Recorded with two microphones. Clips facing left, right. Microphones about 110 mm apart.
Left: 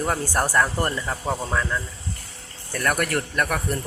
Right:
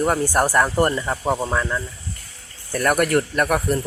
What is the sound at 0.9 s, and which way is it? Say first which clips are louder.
Speech: right 5 dB; 30° right (ahead or behind).